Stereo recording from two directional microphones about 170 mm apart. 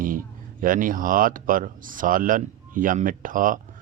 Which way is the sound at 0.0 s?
55° right (ahead or behind).